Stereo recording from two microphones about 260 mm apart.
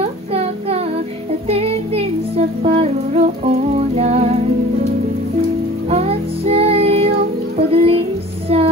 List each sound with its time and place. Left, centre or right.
0.0 s child singing: right
1.5 s music: right
5.9 s child singing: right
8.5 s music: right